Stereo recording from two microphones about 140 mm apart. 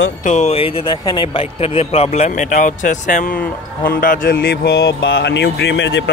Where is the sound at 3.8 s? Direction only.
90° left.